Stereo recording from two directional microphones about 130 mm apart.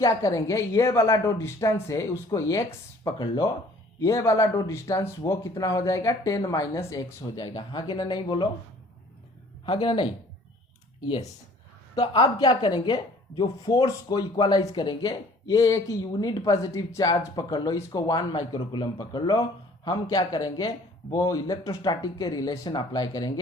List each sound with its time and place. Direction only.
0.0 s a woman's voice: 25° left (ahead or behind)
9.6 s a woman's voice: 40° left (ahead or behind)
11.9 s a woman's voice: 40° left (ahead or behind)